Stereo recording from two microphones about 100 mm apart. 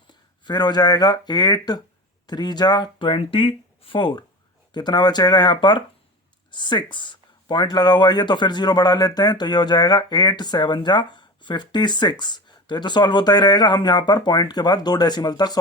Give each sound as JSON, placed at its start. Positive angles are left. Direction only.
{"t": 0.1, "sound": "speech", "side_deg": 50}